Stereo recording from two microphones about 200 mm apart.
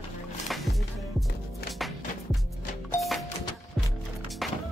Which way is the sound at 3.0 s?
Centre (ahead or behind).